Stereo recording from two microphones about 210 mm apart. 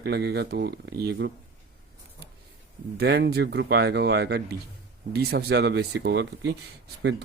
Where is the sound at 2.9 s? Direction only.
50° right (ahead or behind).